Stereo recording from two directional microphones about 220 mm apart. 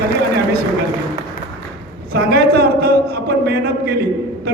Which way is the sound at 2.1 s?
45° right (ahead or behind).